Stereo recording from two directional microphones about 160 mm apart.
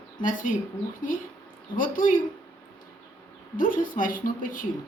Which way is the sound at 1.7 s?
60° left (ahead or behind).